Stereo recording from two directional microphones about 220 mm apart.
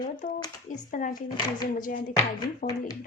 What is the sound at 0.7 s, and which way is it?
Speech, 35° left (ahead or behind).